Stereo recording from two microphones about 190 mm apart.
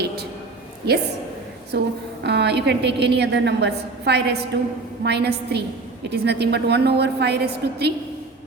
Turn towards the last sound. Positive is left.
turn(degrees=-60)  # may be behind; listen again after turning